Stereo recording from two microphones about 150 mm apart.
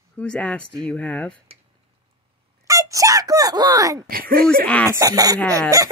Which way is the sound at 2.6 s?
20° right (ahead or behind).